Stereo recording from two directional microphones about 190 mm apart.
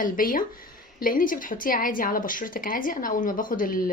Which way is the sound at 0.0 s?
45° left (ahead or behind).